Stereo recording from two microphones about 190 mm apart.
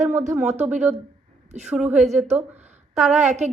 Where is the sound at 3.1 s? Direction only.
35° right (ahead or behind).